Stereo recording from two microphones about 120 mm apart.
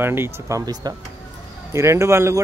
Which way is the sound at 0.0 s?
20° right (ahead or behind).